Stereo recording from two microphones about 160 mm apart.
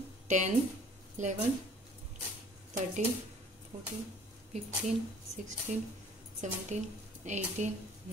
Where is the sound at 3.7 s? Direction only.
45° right (ahead or behind).